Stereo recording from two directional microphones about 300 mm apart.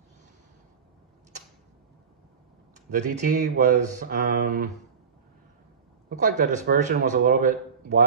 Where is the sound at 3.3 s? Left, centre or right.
Right.